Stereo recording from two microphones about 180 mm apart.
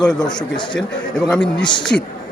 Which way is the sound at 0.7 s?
5° left (ahead or behind).